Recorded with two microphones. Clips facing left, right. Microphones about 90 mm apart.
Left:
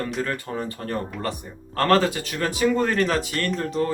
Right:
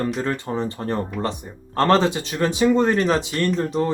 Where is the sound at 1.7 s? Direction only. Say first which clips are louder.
Right 2 dB; 25° right (ahead or behind).